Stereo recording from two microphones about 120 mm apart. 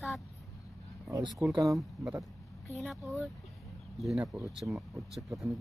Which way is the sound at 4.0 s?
Centre (ahead or behind).